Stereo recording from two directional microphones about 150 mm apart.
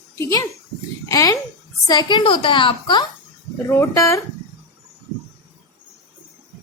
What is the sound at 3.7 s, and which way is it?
Speech, 20° left (ahead or behind).